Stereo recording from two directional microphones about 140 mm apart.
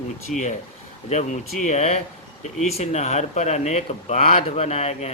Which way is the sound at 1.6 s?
55° left (ahead or behind).